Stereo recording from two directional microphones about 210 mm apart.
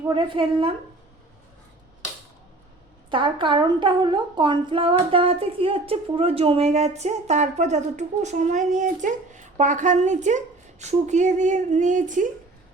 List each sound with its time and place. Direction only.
0.1 s a woman's voice: 25° right (ahead or behind)
3.1 s speech: 25° right (ahead or behind); by 12.3 s 40° right (ahead or behind)